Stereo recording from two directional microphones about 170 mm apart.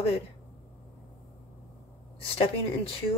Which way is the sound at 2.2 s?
35° left (ahead or behind).